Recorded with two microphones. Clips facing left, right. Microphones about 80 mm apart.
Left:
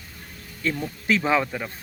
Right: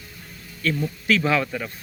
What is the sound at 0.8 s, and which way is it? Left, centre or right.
Speech, left.